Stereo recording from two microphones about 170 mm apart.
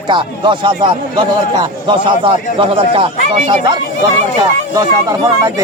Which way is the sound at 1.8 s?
30° right (ahead or behind).